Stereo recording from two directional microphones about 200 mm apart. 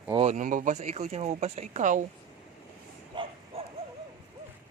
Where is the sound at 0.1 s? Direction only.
30° right (ahead or behind).